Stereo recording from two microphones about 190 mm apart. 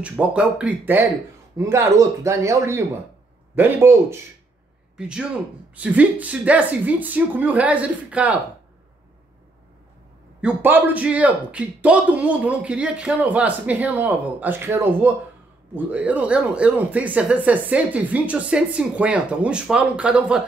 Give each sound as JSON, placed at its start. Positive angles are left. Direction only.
{"t": 0.0, "sound": "a man's voice", "side_deg": -5}
{"t": 10.4, "sound": "speech", "side_deg": -10}